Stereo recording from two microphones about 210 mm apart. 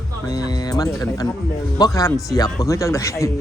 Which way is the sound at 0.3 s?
15° left (ahead or behind).